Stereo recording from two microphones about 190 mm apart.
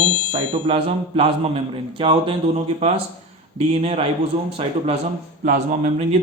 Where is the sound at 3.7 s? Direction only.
30° right (ahead or behind).